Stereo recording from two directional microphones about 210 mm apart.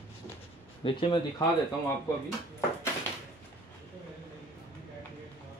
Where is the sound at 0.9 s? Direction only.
25° left (ahead or behind).